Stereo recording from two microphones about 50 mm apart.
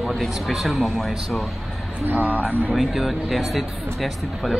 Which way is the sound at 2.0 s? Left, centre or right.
Right.